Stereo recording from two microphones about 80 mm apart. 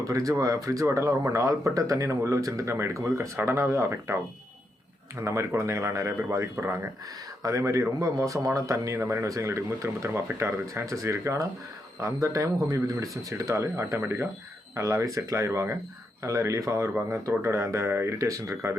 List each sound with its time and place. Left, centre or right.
0.0 s speech: right
5.2 s speech: right
9.0 s speech: right
9.2 s speech: right
14.0 s speech: right
14.8 s speech: right